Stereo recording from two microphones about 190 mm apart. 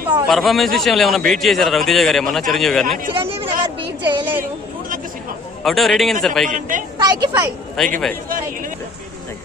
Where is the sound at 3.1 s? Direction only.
30° right (ahead or behind).